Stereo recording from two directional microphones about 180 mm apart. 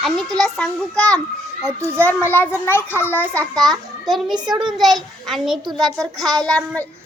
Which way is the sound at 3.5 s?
Centre (ahead or behind).